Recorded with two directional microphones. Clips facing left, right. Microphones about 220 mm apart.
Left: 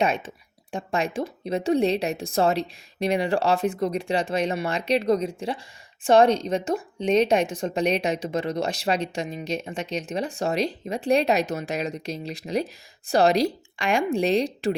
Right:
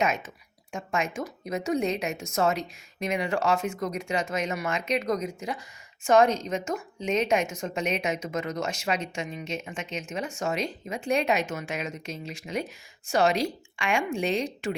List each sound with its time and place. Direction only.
0.0 s a woman's voice: 30° left (ahead or behind)